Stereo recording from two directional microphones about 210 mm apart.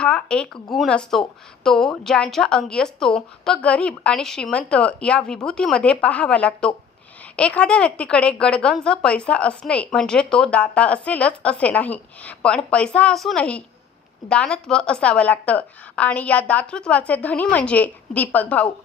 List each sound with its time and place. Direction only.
0.0 s a woman's voice: 5° left (ahead or behind)